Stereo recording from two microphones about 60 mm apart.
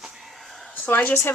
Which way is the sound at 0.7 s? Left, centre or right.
Left.